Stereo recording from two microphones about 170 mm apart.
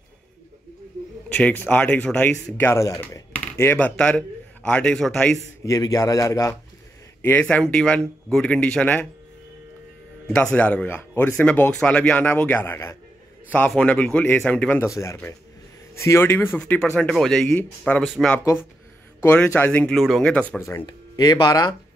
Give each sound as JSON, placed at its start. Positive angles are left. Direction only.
{"t": 1.3, "sound": "speech", "side_deg": 10}
{"t": 5.7, "sound": "a man's voice", "side_deg": 20}
{"t": 10.3, "sound": "speech", "side_deg": 10}
{"t": 18.4, "sound": "speech", "side_deg": 15}
{"t": 20.8, "sound": "speech", "side_deg": 25}